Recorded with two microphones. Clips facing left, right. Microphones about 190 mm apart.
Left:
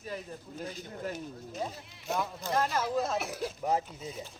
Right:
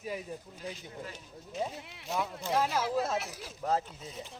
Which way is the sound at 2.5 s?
5° right (ahead or behind).